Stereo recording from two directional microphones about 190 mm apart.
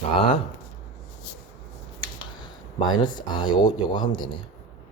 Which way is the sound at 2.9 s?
25° left (ahead or behind).